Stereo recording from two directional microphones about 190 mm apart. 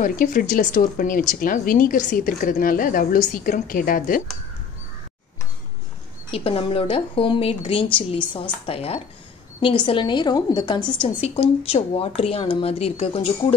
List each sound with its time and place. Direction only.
0.0 s a woman's voice: 45° left (ahead or behind)
6.3 s a woman's voice: 30° left (ahead or behind)